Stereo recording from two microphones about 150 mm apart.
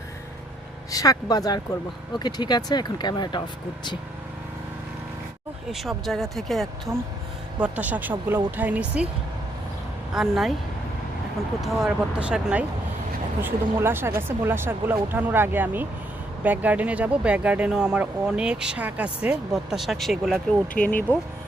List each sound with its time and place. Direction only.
0.9 s speech: 25° left (ahead or behind)
5.7 s speech: centre (ahead or behind)
6.9 s speech: 20° right (ahead or behind)
10.1 s speech: 5° right (ahead or behind)
11.6 s speech: centre (ahead or behind)